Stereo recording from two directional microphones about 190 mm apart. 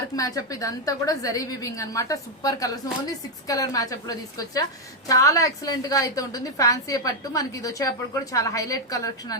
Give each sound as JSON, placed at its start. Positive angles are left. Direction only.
{"t": 0.2, "sound": "a woman's voice", "side_deg": 20}